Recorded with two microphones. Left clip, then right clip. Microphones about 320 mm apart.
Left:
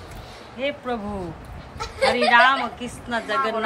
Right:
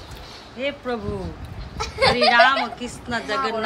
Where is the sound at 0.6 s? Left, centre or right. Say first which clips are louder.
Even; centre.